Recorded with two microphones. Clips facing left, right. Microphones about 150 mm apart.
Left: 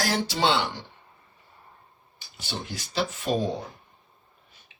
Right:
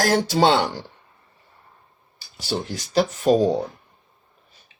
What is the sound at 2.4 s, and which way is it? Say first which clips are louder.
Speech: right 8 dB; 40° right (ahead or behind).